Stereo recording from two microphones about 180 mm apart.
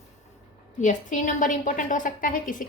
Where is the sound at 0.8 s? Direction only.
45° left (ahead or behind).